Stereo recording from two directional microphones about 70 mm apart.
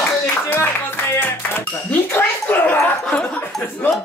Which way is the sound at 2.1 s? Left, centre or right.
Left.